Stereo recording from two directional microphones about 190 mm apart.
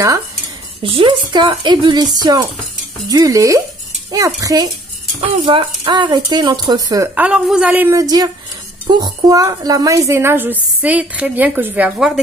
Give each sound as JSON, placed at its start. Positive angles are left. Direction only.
{"t": 0.8, "sound": "a woman's voice", "side_deg": -25}